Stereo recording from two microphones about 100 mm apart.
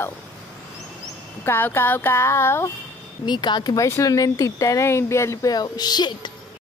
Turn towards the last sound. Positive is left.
turn(degrees=45)  # may be behind; listen again after turning